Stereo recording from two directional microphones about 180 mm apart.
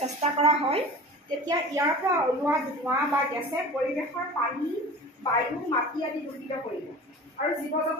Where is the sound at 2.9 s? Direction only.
10° right (ahead or behind).